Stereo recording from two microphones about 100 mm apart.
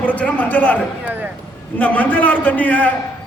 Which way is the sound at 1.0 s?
15° right (ahead or behind).